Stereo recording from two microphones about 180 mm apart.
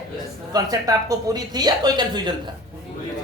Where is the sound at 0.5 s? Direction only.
20° right (ahead or behind).